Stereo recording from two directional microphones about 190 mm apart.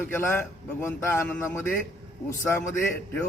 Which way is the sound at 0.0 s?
10° left (ahead or behind).